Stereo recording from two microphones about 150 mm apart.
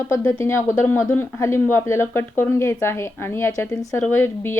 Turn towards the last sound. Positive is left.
turn(degrees=15)  # may be behind; listen again after turning